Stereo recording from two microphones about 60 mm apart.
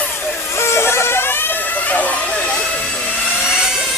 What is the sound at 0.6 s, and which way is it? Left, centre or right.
Vehicle, left.